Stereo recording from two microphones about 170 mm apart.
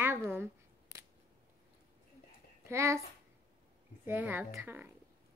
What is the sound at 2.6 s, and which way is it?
Speech, 15° right (ahead or behind).